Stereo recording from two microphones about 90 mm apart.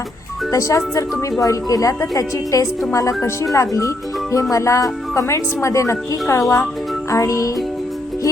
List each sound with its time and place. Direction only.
0.5 s speech: 35° left (ahead or behind)